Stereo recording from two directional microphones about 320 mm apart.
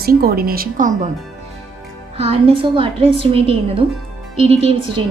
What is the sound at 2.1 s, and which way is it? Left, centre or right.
Speech, centre.